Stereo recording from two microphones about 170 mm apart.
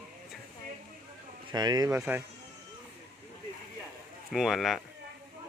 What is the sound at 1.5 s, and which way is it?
Speech, 25° right (ahead or behind).